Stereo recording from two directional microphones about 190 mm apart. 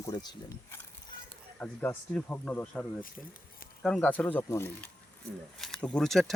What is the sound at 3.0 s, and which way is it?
Speech, 45° left (ahead or behind).